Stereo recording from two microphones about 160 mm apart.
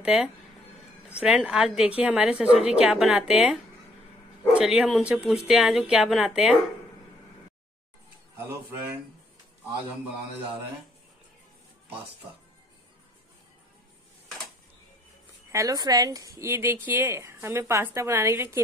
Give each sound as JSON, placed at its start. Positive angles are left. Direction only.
{"t": 0.0, "sound": "a woman's voice", "side_deg": -5}
{"t": 4.6, "sound": "a woman's voice", "side_deg": -5}
{"t": 15.5, "sound": "a woman's voice", "side_deg": -20}